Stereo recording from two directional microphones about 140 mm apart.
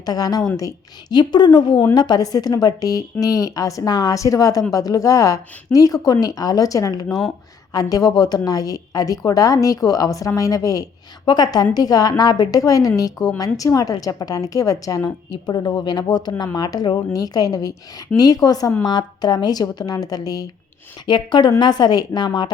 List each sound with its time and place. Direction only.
0.0 s a woman's voice: 25° left (ahead or behind)
7.1 s speech: centre (ahead or behind)
7.7 s a woman's voice: 25° left (ahead or behind)